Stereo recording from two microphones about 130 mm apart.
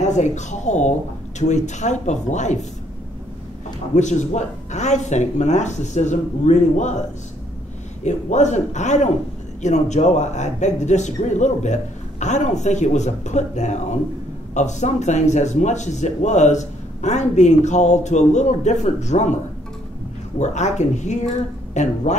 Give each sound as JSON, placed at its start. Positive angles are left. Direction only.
{"t": 0.0, "sound": "a man's voice", "side_deg": 65}
{"t": 3.9, "sound": "a man's voice", "side_deg": 65}
{"t": 8.0, "sound": "a man's voice", "side_deg": 65}
{"t": 20.3, "sound": "a man's voice", "side_deg": 65}